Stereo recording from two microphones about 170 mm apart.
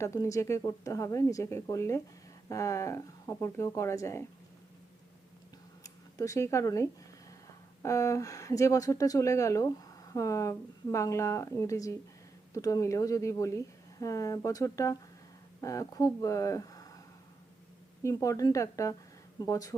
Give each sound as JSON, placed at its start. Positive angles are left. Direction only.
{"t": 0.0, "sound": "speech", "side_deg": 20}
{"t": 5.8, "sound": "a woman's voice", "side_deg": 20}
{"t": 18.0, "sound": "a woman's voice", "side_deg": 20}